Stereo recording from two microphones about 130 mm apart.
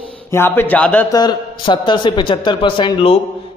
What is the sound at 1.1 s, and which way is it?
A man's voice, 35° left (ahead or behind).